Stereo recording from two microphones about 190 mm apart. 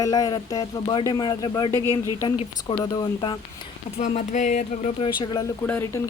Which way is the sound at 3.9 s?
40° left (ahead or behind).